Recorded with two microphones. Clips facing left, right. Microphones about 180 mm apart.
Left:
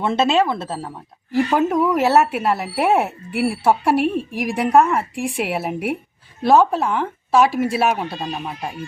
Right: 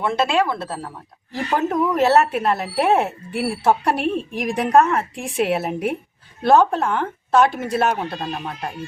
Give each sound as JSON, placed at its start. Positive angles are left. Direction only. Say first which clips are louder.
{"t": 0.0, "sound": "speech", "louder": "left 2 dB", "side_deg": 25}
{"t": 1.3, "sound": "speech", "louder": "left 4 dB", "side_deg": 5}